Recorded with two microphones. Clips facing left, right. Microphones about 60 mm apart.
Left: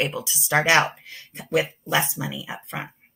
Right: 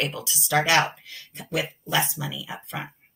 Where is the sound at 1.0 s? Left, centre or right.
Left.